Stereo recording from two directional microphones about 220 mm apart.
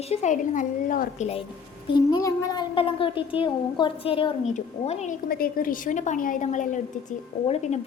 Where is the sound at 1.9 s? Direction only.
15° left (ahead or behind).